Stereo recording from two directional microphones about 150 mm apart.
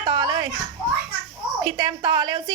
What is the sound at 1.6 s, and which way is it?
Speech, 30° right (ahead or behind).